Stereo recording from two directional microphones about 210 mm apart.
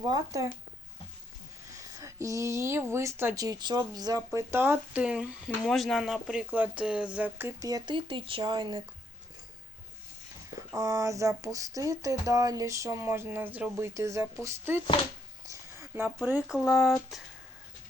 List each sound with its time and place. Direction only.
0.0 s speech: 15° right (ahead or behind)
2.0 s speech: 15° right (ahead or behind)
10.7 s speech: 15° right (ahead or behind)
15.4 s a sound: 10° right (ahead or behind)